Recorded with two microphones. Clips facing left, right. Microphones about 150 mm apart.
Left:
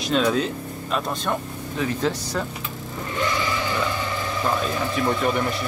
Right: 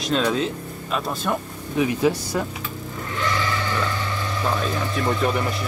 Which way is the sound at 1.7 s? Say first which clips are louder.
Right 4 dB; 15° right (ahead or behind).